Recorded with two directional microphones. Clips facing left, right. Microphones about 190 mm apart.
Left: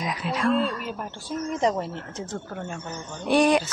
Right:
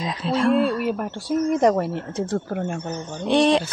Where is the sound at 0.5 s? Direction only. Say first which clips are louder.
Right 4 dB; 5° right (ahead or behind).